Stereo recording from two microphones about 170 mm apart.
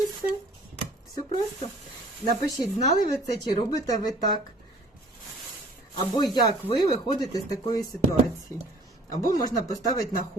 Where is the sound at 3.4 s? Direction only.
25° left (ahead or behind).